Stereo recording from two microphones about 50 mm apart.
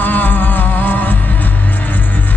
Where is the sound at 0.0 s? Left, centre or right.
Left.